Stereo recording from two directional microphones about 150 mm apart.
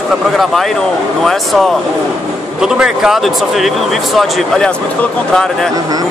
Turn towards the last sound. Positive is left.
turn(degrees=5)  # may be behind; listen again after turning